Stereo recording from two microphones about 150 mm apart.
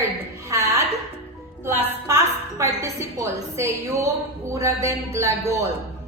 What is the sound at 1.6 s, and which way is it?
A woman's voice, 15° right (ahead or behind).